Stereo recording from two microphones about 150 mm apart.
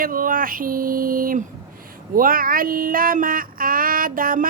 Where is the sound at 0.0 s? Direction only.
70° right (ahead or behind).